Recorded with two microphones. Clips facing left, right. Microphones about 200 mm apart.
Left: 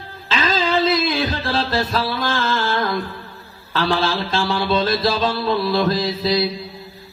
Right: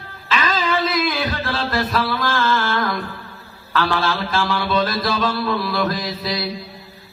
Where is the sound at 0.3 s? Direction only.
30° left (ahead or behind).